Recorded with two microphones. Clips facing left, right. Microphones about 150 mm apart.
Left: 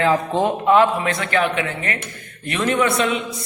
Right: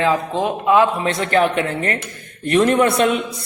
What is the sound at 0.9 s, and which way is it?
Speech, 35° right (ahead or behind).